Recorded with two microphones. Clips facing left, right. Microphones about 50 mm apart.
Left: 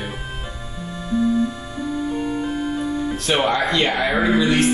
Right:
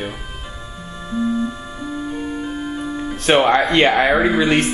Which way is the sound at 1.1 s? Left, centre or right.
Right.